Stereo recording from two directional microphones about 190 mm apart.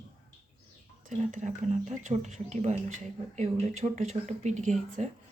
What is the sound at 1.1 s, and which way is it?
Speech, 40° right (ahead or behind).